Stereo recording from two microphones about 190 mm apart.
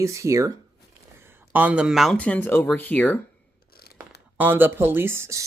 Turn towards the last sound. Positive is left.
turn(degrees=-15)  # may be behind; listen again after turning